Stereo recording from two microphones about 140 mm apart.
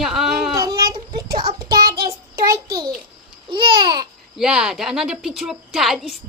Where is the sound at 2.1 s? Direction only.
25° right (ahead or behind).